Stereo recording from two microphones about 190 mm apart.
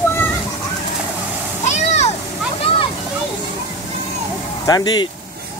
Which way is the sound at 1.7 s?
35° left (ahead or behind).